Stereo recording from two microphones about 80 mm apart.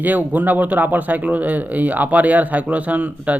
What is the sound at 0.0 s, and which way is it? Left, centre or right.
Speech, right.